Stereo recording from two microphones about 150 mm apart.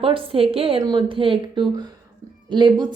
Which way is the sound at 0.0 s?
35° right (ahead or behind).